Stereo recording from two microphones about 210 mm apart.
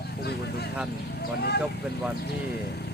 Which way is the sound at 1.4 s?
50° left (ahead or behind).